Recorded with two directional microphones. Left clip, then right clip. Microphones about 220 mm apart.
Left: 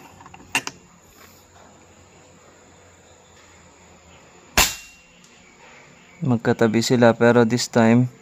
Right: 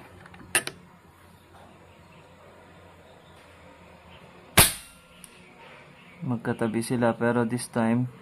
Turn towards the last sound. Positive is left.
turn(degrees=45)  # may be behind; listen again after turning